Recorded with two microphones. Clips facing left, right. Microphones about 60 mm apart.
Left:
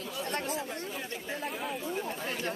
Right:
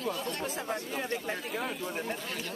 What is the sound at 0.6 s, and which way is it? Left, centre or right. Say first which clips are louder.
Speech: right 2 dB; right.